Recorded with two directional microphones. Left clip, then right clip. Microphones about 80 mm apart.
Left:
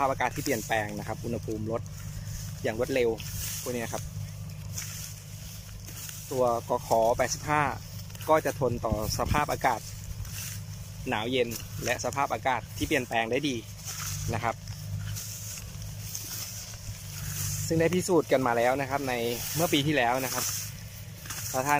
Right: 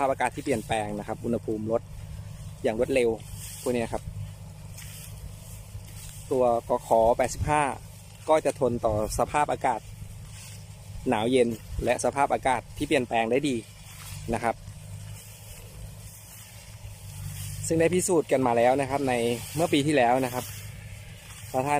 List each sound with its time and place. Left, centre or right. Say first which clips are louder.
0.0 s speech: right 2 dB; right
1.0 s speech: right 5 dB; right
6.4 s speech: right 2 dB; right
7.0 s speech: right 3 dB; right
8.8 s speech: right 5 dB; right
9.6 s speech: even; right
11.0 s speech: right 5 dB; right
17.7 s speech: right 2 dB; right
19.7 s speech: right 4 dB; right
21.5 s speech: right 1 dB; right